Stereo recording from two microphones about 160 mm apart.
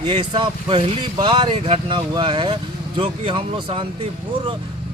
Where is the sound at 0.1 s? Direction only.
30° right (ahead or behind).